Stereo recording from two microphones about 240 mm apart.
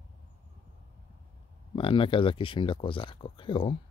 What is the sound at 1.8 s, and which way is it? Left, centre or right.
Speech, left.